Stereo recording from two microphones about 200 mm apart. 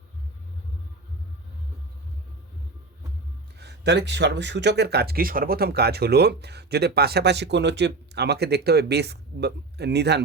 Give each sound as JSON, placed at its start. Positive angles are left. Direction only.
{"t": 3.6, "sound": "speech", "side_deg": -60}